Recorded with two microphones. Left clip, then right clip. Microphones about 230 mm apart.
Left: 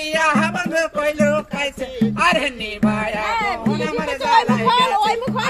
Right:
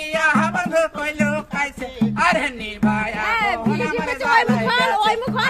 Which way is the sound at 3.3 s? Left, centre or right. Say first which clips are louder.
Right 1 dB; right.